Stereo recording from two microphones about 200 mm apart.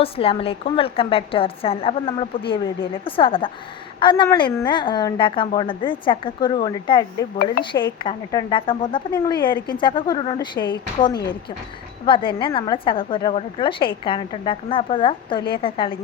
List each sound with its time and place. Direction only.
0.0 s a woman's voice: 30° left (ahead or behind)